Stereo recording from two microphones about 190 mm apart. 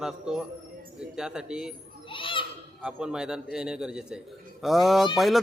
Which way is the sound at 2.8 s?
5° right (ahead or behind).